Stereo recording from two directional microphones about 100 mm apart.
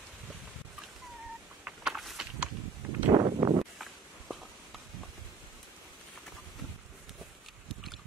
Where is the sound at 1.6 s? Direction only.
5° right (ahead or behind).